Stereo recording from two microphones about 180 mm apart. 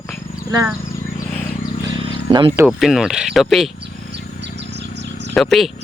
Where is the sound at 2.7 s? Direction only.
Centre (ahead or behind).